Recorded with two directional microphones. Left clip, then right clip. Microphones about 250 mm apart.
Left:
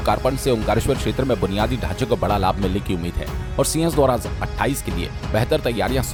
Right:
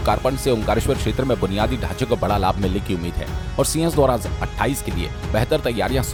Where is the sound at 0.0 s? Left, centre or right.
Centre.